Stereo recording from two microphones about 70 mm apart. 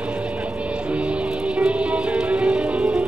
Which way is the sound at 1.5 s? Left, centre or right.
Centre.